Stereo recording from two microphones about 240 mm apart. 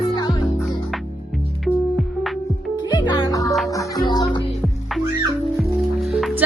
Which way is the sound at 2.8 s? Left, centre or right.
Centre.